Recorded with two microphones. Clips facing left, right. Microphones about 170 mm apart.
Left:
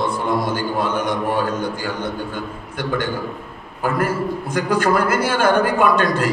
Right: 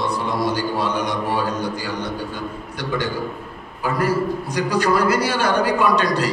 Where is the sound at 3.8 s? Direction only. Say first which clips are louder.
Even; 50° left (ahead or behind).